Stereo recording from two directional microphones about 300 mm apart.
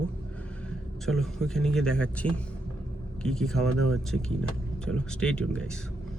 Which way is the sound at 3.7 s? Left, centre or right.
Right.